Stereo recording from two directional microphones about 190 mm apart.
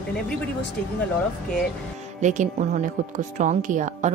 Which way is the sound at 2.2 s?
40° right (ahead or behind).